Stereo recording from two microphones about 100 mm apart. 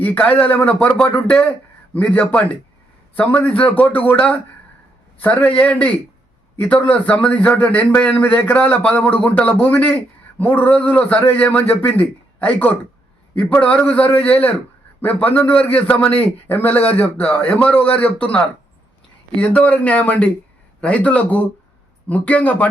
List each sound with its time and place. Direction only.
0.0 s a man's voice: 15° left (ahead or behind)